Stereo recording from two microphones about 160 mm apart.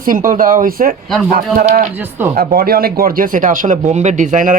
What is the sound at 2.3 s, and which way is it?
Speech, 65° right (ahead or behind).